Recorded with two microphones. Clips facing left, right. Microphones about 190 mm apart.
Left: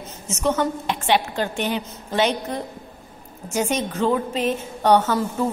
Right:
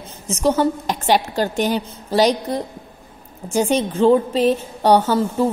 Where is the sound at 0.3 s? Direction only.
35° right (ahead or behind).